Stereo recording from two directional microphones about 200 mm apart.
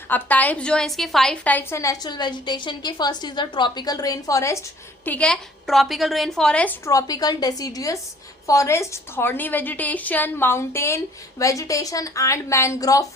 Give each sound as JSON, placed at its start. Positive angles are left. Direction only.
{"t": 0.1, "sound": "a woman's voice", "side_deg": 10}